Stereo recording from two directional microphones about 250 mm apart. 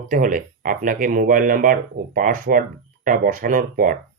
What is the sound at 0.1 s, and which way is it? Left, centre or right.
Speech, right.